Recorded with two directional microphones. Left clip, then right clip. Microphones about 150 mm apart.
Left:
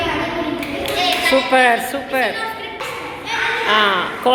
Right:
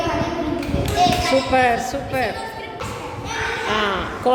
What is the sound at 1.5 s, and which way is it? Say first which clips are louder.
Speech: left 3 dB; 5° right (ahead or behind).